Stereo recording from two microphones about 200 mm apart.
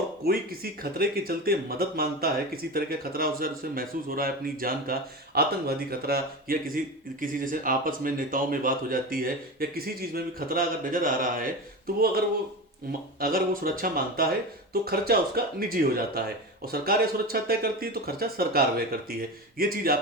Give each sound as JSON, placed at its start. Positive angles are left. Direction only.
{"t": 0.3, "sound": "speech", "side_deg": -50}
{"t": 13.1, "sound": "speech", "side_deg": -45}